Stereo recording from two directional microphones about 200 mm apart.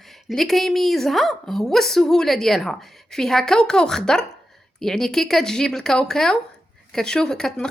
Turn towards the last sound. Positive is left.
turn(degrees=5)  # may be behind; listen again after turning